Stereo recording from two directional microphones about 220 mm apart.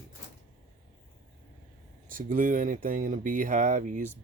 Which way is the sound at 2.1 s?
35° right (ahead or behind).